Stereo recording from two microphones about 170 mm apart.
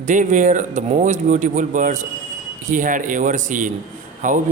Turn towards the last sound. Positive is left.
turn(degrees=-50)  # may be behind; listen again after turning